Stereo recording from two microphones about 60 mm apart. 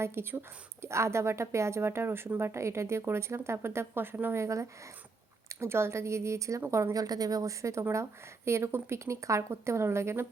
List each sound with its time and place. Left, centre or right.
0.0 s a woman's voice: right
4.4 s a woman's voice: right
6.9 s a woman's voice: right